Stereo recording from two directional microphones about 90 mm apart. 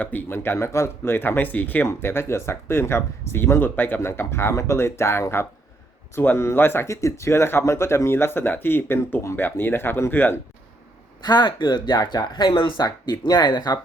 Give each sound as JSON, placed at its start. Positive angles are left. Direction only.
{"t": 0.0, "sound": "speech", "side_deg": 20}
{"t": 11.2, "sound": "speech", "side_deg": 50}
{"t": 12.8, "sound": "speech", "side_deg": 50}